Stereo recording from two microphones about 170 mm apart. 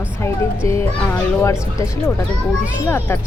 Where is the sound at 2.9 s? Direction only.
10° left (ahead or behind).